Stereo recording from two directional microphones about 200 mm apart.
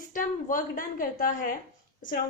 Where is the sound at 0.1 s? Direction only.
40° left (ahead or behind).